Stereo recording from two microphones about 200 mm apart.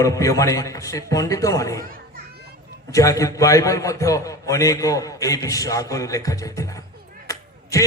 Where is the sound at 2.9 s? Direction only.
15° left (ahead or behind).